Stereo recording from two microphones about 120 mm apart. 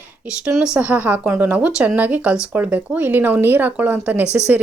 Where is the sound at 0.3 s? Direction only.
5° right (ahead or behind).